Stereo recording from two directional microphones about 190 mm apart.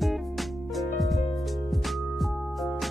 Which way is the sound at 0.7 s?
Centre (ahead or behind).